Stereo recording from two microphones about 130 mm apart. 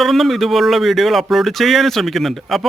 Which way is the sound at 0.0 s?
Centre (ahead or behind).